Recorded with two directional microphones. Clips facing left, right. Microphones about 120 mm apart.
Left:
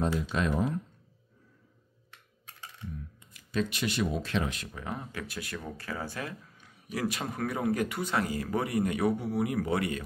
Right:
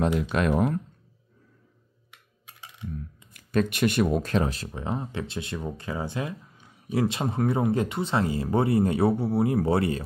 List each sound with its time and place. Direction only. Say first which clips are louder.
0.2 s speech: right 5 dB; 65° right (ahead or behind)
2.0 s computer keyboard: right 1 dB; 10° right (ahead or behind)
3.3 s speech: right 7 dB; 55° right (ahead or behind); by 10.0 s 30° right (ahead or behind)